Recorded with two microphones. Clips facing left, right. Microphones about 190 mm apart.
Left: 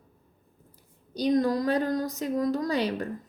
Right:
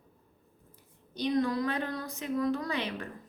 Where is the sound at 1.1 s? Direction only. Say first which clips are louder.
Left 5 dB; 40° left (ahead or behind).